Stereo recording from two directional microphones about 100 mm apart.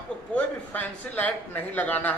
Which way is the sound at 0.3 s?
15° left (ahead or behind).